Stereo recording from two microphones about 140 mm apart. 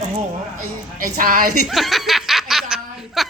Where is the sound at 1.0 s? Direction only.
90° right.